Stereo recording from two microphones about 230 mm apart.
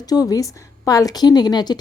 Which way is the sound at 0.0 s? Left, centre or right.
Centre.